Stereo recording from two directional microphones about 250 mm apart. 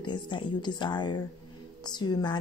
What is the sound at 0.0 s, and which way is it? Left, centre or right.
Speech, centre.